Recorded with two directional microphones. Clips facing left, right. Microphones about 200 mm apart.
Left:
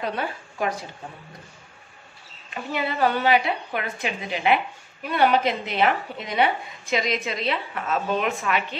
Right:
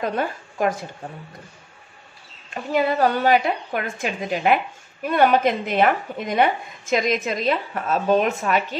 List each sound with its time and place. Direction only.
0.0 s speech: 45° right (ahead or behind)
2.5 s speech: 45° right (ahead or behind)